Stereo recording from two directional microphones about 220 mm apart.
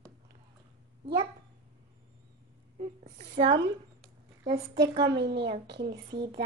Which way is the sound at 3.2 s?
35° right (ahead or behind).